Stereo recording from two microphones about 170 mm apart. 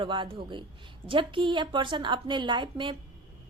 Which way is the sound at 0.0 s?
30° right (ahead or behind).